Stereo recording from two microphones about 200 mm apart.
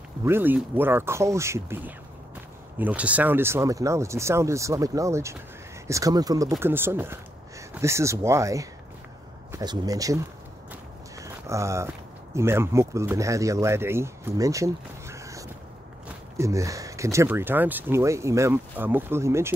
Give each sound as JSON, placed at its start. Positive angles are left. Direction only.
{"t": 0.2, "sound": "speech", "side_deg": -10}
{"t": 10.7, "sound": "walk", "side_deg": -15}
{"t": 12.4, "sound": "speech", "side_deg": -15}